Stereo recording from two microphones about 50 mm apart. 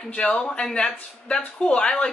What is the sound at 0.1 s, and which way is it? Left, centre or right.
Speech, centre.